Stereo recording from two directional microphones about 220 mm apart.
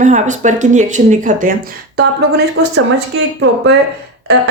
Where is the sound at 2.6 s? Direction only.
80° right.